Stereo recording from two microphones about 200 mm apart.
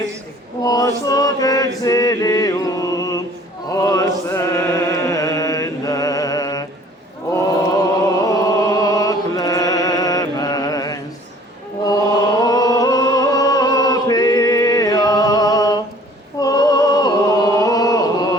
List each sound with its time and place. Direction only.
0.6 s chant: 20° left (ahead or behind)
8.4 s music: 15° left (ahead or behind)
11.9 s chant: 20° left (ahead or behind)